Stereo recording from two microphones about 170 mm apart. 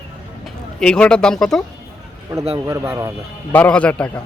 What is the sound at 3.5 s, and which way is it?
Speech, 10° left (ahead or behind).